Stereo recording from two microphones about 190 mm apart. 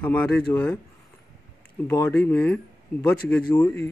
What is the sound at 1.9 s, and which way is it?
Speech, 10° left (ahead or behind).